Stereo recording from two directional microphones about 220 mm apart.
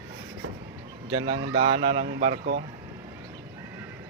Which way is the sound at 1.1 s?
25° right (ahead or behind).